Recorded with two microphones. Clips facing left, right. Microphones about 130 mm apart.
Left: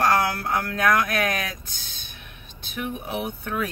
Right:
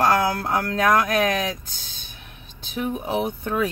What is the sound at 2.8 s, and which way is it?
Speech, 30° right (ahead or behind).